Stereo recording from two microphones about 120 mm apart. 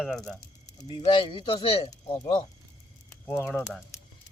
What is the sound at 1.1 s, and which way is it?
Speech, 45° left (ahead or behind).